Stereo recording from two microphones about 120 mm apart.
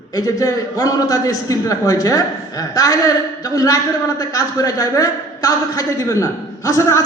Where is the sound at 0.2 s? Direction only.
30° left (ahead or behind).